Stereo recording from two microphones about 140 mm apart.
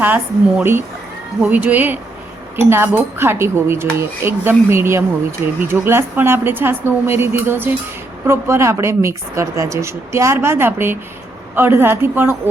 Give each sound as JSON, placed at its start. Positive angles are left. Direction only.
{"t": 0.0, "sound": "speech", "side_deg": -15}